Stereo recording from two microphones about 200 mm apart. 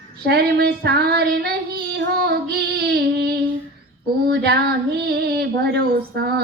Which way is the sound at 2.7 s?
55° right (ahead or behind).